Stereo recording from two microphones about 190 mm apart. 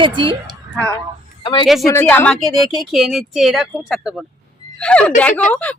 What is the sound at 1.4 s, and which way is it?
Speech, 25° left (ahead or behind).